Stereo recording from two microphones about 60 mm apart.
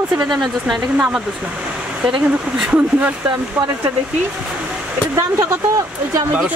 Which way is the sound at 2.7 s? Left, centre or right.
Right.